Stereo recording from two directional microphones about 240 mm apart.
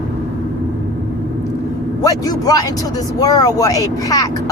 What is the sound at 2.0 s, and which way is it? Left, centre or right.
Speech, centre.